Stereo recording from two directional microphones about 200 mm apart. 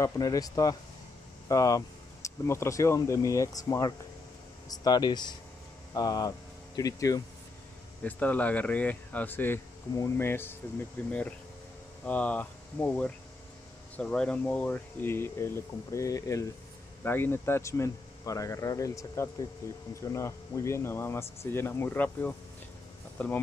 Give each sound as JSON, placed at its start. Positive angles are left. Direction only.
{"t": 0.0, "sound": "speech", "side_deg": 15}